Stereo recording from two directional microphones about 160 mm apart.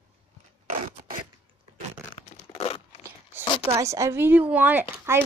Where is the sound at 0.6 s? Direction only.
50° right (ahead or behind).